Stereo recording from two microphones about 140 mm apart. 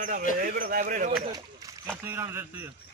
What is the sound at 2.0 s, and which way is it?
Speech, 15° right (ahead or behind).